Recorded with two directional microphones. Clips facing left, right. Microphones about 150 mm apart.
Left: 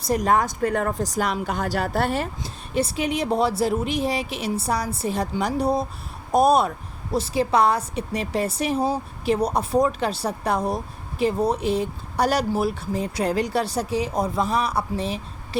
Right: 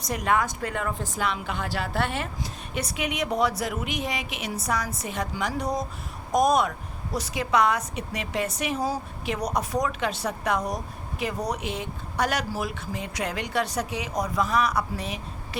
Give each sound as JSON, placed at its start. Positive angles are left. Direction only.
{"t": 0.1, "sound": "speech", "side_deg": 35}